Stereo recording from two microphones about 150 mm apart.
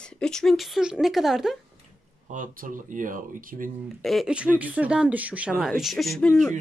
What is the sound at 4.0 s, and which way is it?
Speech, centre (ahead or behind).